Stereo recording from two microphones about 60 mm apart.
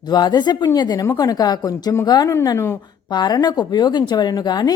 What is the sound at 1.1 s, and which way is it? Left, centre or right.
Speech, left.